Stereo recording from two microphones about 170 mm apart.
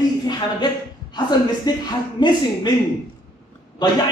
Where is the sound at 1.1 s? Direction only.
25° left (ahead or behind).